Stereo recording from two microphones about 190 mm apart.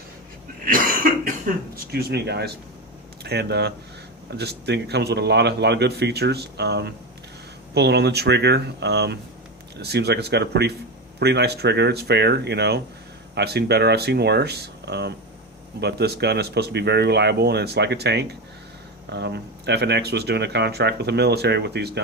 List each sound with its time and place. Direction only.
0.6 s cough: 45° right (ahead or behind)
1.7 s speech: 55° right (ahead or behind)